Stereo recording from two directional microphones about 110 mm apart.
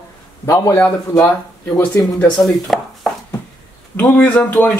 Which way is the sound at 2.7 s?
5° left (ahead or behind).